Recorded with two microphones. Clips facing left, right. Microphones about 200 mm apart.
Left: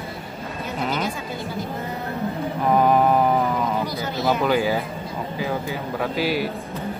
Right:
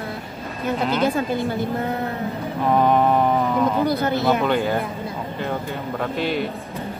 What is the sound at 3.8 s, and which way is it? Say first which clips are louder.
Speech: right 7 dB; 55° right (ahead or behind).